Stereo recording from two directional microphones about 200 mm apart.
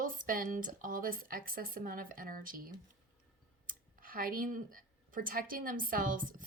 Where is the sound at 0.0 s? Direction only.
45° right (ahead or behind).